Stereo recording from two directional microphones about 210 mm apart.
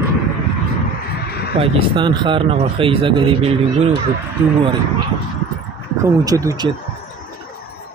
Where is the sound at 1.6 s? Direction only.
25° right (ahead or behind).